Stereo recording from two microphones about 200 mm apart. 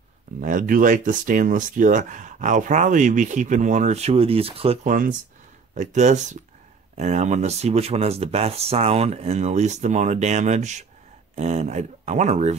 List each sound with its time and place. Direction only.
0.4 s speech: 40° right (ahead or behind)